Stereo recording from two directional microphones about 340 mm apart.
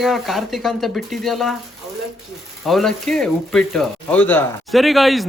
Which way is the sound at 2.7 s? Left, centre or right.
Centre.